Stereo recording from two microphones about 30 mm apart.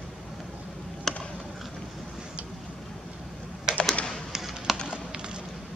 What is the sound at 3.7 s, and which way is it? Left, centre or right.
Typing, right.